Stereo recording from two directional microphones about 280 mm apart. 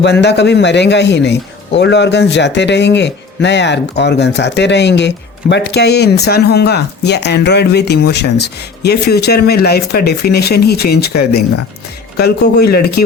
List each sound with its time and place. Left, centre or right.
0.0 s a man's voice: left
12.1 s a man's voice: left